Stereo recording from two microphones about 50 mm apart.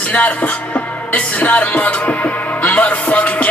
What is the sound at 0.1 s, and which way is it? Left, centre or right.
Speech, left.